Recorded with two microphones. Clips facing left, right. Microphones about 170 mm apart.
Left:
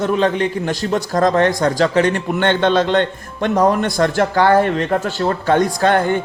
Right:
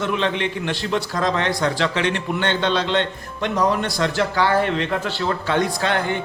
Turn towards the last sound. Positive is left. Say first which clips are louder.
# left 7 dB
turn(degrees=45)  # may be behind; listen again after turning